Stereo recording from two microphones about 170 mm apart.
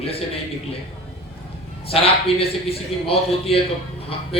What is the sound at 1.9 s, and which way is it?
A man's voice, 35° left (ahead or behind).